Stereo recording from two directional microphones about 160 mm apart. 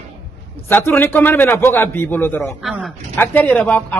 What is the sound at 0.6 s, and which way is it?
A man's voice, 10° left (ahead or behind).